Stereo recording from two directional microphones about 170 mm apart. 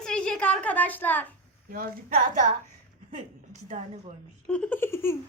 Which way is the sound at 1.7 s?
60° right (ahead or behind).